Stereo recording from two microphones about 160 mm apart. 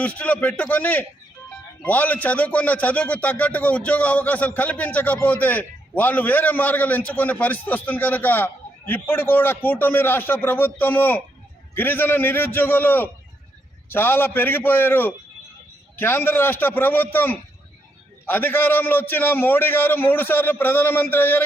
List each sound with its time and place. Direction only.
0.0 s a man's voice: 10° left (ahead or behind)